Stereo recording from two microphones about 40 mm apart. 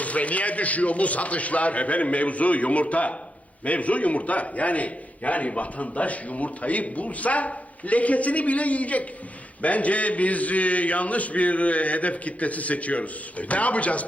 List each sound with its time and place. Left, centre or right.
0.0 s a man's voice: left